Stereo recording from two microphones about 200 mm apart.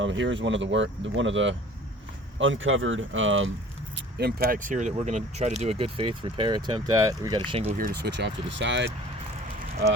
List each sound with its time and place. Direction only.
0.0 s speech: 70° right (ahead or behind)
3.9 s speech: 55° right (ahead or behind); by 7.6 s 20° right (ahead or behind)
7.8 s speech: 50° right (ahead or behind)